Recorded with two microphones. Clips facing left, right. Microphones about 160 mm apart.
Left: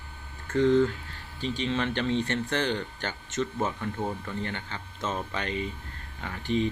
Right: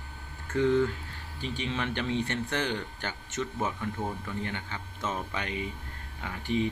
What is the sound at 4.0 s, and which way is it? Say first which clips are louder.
Speech: left 3 dB; 25° left (ahead or behind).